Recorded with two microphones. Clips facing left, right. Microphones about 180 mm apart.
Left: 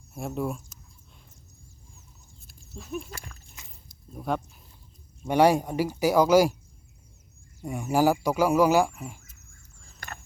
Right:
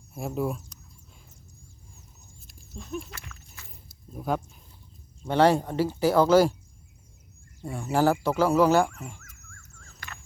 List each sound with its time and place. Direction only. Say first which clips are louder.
0.1 s speech: right 1 dB; centre (ahead or behind)
2.7 s speech: even; 5° left (ahead or behind)
3.1 s speech: left 3 dB; 35° left (ahead or behind)
3.8 s a sound: right 1 dB; centre (ahead or behind)
5.2 s speech: left 1 dB; 10° left (ahead or behind)
7.6 s speech: left 1 dB; 10° left (ahead or behind)
10.0 s squeal: left 3 dB; 45° left (ahead or behind)